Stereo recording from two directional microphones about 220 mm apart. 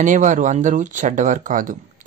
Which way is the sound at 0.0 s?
35° right (ahead or behind).